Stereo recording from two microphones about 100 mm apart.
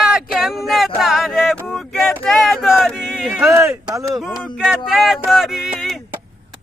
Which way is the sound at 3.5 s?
25° right (ahead or behind).